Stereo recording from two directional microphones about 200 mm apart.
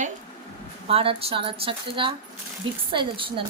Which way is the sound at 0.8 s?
30° right (ahead or behind).